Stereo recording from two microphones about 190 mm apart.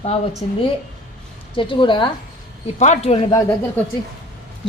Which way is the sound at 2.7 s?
40° left (ahead or behind).